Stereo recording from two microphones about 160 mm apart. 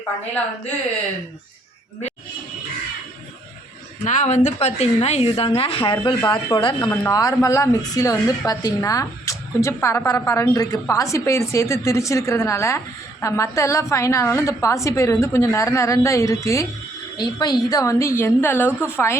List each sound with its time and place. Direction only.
4.0 s a woman's voice: 50° left (ahead or behind); by 6.7 s 30° left (ahead or behind)
6.9 s a woman's voice: 20° left (ahead or behind)